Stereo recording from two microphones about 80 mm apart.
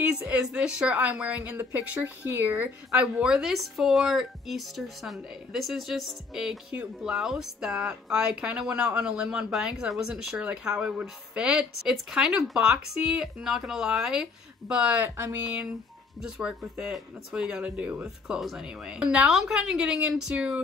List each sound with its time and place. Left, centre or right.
0.0 s speech: centre
2.9 s speech: centre